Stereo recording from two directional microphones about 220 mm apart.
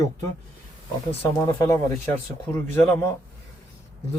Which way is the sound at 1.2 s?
15° left (ahead or behind).